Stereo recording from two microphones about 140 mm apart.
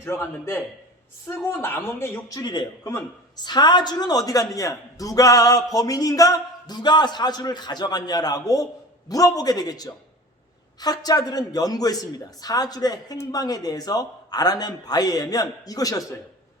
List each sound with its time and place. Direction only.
0.0 s speech: 20° left (ahead or behind)
2.4 s speech: 30° left (ahead or behind)